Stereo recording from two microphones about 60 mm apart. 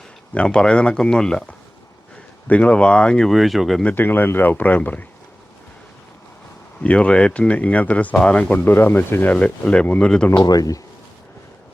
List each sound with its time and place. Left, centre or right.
0.3 s speech: centre
3.2 s speech: centre
3.9 s speech: left
6.8 s speech: left
8.5 s speech: left
9.3 s speech: left
10.0 s speech: centre
10.3 s speech: left